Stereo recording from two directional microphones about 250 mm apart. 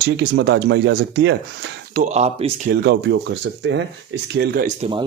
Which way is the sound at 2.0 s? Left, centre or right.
Right.